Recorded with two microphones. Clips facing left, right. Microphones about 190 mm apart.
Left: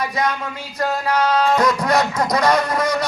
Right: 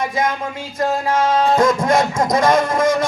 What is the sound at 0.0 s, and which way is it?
Speech, 25° right (ahead or behind).